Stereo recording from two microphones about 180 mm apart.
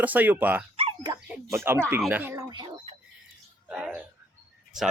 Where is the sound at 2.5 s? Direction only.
25° right (ahead or behind).